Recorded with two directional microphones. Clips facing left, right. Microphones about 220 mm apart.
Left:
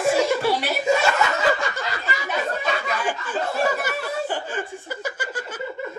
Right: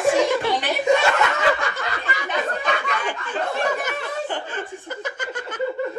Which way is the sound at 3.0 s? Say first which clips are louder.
Even; 5° left (ahead or behind).